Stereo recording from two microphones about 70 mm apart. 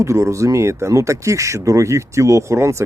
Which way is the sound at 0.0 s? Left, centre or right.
Right.